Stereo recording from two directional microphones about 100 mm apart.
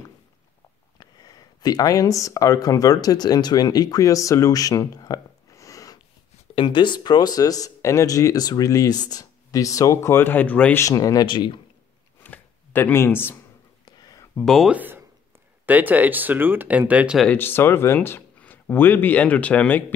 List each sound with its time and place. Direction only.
0.9 s speech: 40° left (ahead or behind)
6.5 s speech: 55° left (ahead or behind); by 10.8 s 15° left (ahead or behind)
10.8 s speech: 35° left (ahead or behind)
11.2 s speech: 55° left (ahead or behind)
12.2 s a sound: 20° left (ahead or behind)
13.8 s a sound: 40° left (ahead or behind)
14.4 s speech: centre (ahead or behind)
14.7 s speech: 20° right (ahead or behind)
17.3 s speech: 20° left (ahead or behind)